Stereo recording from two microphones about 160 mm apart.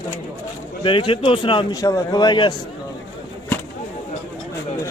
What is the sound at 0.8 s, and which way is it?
Speech, 30° left (ahead or behind).